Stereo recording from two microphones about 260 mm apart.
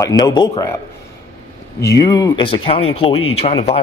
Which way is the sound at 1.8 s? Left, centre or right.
Centre.